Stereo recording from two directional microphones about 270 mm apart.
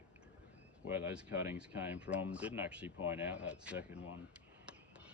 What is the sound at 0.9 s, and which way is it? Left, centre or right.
Speech, centre.